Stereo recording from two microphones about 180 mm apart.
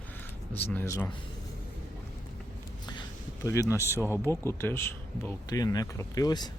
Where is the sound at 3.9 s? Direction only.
15° right (ahead or behind).